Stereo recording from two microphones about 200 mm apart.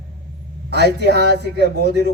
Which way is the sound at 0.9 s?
55° right (ahead or behind).